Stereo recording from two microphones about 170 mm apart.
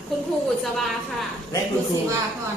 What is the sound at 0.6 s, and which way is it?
Speech, centre (ahead or behind).